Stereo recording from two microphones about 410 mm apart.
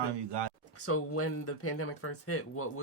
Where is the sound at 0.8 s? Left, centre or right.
Left.